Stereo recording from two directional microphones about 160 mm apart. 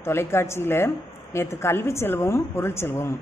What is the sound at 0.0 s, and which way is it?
Speech, 15° left (ahead or behind).